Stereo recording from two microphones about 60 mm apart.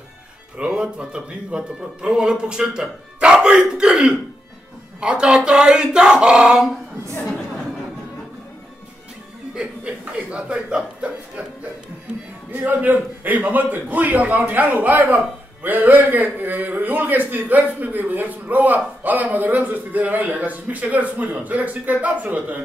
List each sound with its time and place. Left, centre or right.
0.6 s a man's voice: centre
9.6 s a man's voice: centre
12.4 s a man's voice: right